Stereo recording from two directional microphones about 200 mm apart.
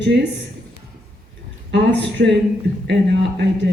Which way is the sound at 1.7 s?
60° right (ahead or behind).